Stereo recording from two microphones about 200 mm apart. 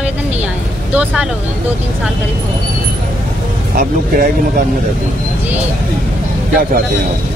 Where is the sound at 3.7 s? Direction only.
45° right (ahead or behind).